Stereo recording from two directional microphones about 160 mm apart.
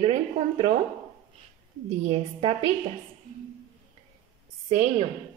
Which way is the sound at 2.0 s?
40° right (ahead or behind).